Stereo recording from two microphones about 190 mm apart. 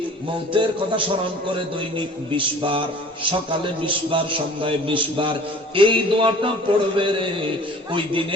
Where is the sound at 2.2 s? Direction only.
25° right (ahead or behind).